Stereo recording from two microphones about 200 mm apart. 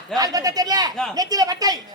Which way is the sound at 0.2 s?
20° right (ahead or behind).